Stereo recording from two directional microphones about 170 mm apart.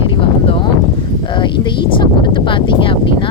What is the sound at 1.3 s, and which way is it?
Speech, 30° left (ahead or behind).